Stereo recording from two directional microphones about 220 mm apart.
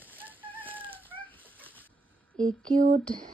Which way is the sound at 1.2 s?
5° left (ahead or behind).